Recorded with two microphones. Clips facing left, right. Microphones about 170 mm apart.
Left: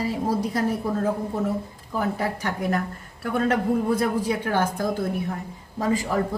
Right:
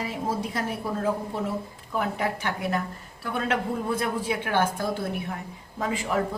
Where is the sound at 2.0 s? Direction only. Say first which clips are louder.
Left 2 dB; 40° left (ahead or behind).